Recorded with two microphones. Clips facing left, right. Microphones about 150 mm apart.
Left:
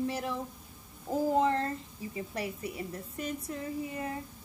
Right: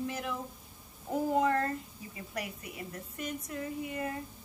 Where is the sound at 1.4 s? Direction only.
25° left (ahead or behind).